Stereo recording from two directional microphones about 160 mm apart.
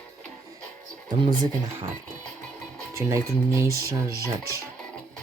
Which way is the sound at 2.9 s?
20° right (ahead or behind).